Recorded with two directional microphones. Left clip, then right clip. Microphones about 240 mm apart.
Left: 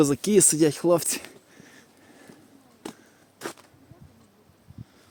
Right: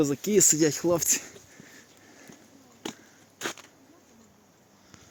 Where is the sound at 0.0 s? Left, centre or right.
Left.